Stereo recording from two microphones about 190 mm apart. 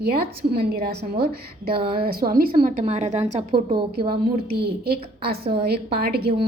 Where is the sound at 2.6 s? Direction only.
35° right (ahead or behind).